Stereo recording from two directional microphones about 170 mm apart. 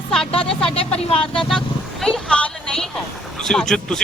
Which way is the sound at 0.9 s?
35° left (ahead or behind).